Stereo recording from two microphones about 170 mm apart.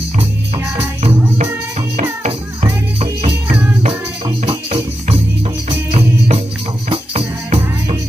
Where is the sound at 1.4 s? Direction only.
40° right (ahead or behind).